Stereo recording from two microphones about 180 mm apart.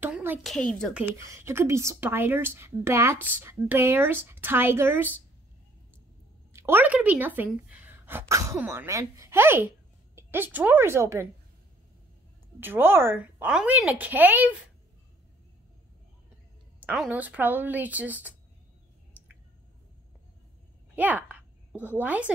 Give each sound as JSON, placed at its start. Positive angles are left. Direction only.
{"t": 0.0, "sound": "a sound", "side_deg": -10}
{"t": 0.4, "sound": "a woman's voice", "side_deg": 0}
{"t": 1.1, "sound": "speech", "side_deg": -15}
{"t": 6.5, "sound": "speech", "side_deg": -10}
{"t": 12.5, "sound": "speech", "side_deg": -10}
{"t": 16.8, "sound": "speech", "side_deg": -5}
{"t": 20.9, "sound": "a sound", "side_deg": -10}
{"t": 21.9, "sound": "speech", "side_deg": -10}